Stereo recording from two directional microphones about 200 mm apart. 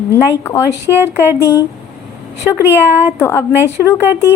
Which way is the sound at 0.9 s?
10° right (ahead or behind).